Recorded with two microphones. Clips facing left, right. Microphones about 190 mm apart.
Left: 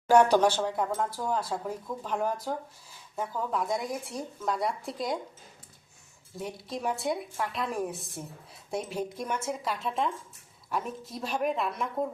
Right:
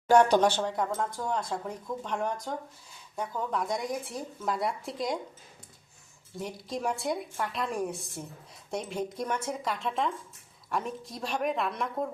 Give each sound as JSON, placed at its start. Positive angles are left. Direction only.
{"t": 0.1, "sound": "speech", "side_deg": 10}
{"t": 6.3, "sound": "speech", "side_deg": 0}